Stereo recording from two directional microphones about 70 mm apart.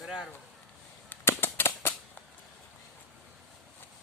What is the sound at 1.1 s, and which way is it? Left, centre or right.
Cap gun, left.